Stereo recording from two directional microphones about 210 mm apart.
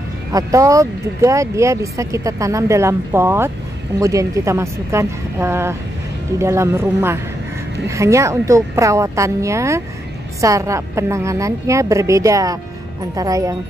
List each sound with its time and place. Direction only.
0.3 s speech: 15° right (ahead or behind)